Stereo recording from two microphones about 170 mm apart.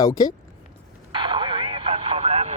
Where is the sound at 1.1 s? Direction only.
30° right (ahead or behind).